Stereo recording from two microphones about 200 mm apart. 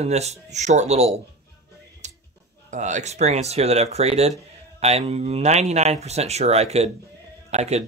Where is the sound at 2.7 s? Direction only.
35° right (ahead or behind).